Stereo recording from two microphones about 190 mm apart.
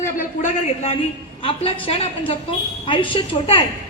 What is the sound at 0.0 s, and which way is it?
A man's voice, 45° left (ahead or behind).